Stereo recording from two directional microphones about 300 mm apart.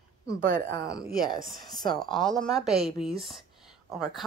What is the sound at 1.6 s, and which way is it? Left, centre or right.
Speech, centre.